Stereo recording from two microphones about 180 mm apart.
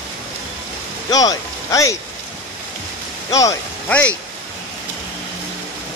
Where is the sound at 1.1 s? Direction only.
20° left (ahead or behind).